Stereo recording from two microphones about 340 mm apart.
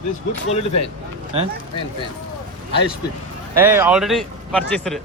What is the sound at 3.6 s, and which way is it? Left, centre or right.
Speech, centre.